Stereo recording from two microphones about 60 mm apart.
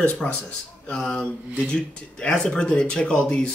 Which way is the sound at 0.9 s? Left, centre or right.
Centre.